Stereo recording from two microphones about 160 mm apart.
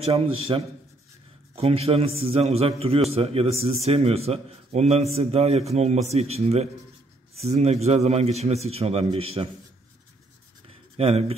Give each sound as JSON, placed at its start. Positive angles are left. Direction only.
{"t": 0.0, "sound": "a man's voice", "side_deg": -35}
{"t": 11.0, "sound": "a man's voice", "side_deg": -40}